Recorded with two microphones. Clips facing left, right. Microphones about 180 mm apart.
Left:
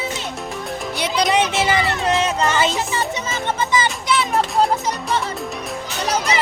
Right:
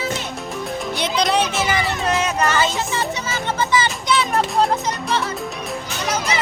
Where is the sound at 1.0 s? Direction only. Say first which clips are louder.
Left 1 dB; 10° left (ahead or behind).